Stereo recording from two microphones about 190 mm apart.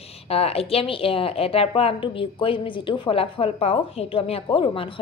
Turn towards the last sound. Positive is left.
turn(degrees=25)  # may be behind; listen again after turning